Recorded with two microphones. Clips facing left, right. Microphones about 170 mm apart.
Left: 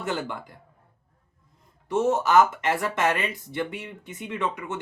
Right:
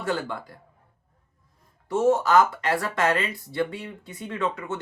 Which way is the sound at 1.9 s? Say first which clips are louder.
Right 1 dB; 20° left (ahead or behind).